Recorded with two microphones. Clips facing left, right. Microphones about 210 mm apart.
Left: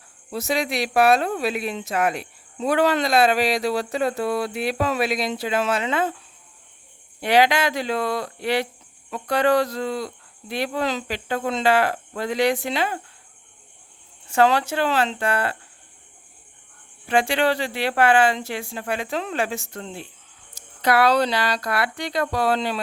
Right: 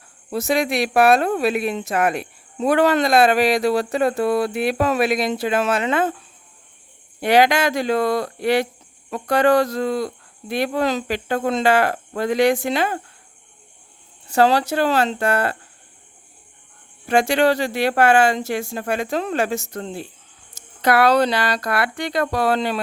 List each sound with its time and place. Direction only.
0.3 s speech: 50° right (ahead or behind)
7.2 s speech: 45° right (ahead or behind)
14.3 s speech: 35° right (ahead or behind)
17.1 s speech: 45° right (ahead or behind)
20.6 s speech: 50° right (ahead or behind)